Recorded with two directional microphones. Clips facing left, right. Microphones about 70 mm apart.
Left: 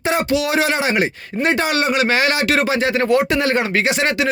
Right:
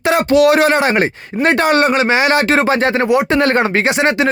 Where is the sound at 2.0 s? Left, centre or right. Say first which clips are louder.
Right 4 dB; right.